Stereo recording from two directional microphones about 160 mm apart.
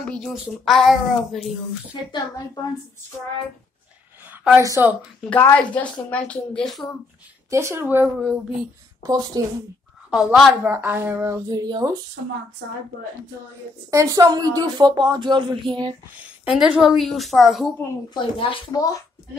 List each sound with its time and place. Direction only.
0.1 s a child's voice: centre (ahead or behind)
4.6 s speech: 15° right (ahead or behind)
5.3 s a woman's voice: 10° left (ahead or behind)
7.4 s speech: 15° right (ahead or behind)
9.0 s speech: 25° right (ahead or behind)
10.1 s a child's voice: centre (ahead or behind)
10.6 s speech: 15° right (ahead or behind)
13.8 s speech: 20° right (ahead or behind)
16.4 s a child's voice: 5° right (ahead or behind)
18.1 s speech: 35° left (ahead or behind)
18.7 s a child's voice: 20° left (ahead or behind)